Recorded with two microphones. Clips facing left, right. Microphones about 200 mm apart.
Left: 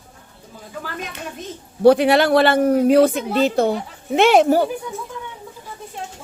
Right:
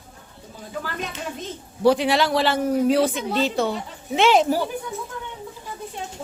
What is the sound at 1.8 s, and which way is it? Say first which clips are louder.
Speech: left 6 dB; 60° left (ahead or behind).